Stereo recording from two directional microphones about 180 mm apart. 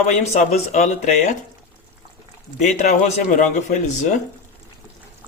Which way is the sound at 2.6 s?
40° left (ahead or behind).